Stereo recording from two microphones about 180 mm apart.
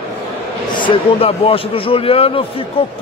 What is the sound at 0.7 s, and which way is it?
A man's voice, 25° left (ahead or behind).